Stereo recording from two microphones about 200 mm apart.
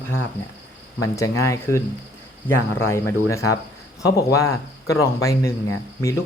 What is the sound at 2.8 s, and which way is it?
Speech, 15° left (ahead or behind).